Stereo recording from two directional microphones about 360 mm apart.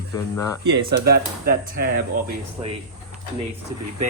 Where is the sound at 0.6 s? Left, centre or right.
Right.